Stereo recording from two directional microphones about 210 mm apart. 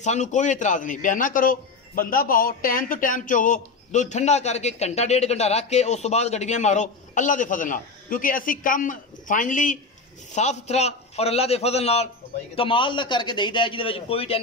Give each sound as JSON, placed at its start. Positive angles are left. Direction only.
{"t": 0.0, "sound": "a man's voice", "side_deg": 35}